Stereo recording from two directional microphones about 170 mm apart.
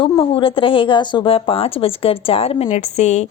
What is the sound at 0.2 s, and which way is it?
A woman's voice, 30° left (ahead or behind).